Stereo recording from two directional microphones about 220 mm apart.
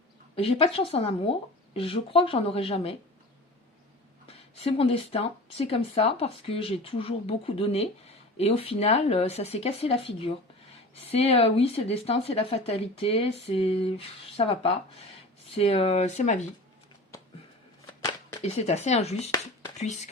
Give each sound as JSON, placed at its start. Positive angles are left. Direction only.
{"t": 0.3, "sound": "speech", "side_deg": 25}
{"t": 4.3, "sound": "speech", "side_deg": 25}
{"t": 18.4, "sound": "speech", "side_deg": 30}